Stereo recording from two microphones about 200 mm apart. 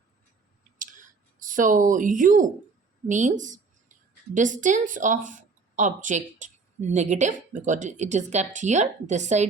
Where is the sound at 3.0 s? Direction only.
40° right (ahead or behind).